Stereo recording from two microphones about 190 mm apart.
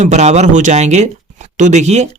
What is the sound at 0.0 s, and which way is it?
Speech, 35° right (ahead or behind).